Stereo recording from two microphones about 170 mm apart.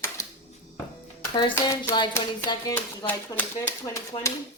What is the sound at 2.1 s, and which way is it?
Hands, 20° left (ahead or behind).